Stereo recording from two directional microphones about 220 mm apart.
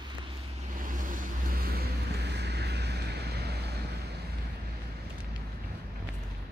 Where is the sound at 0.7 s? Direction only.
35° right (ahead or behind).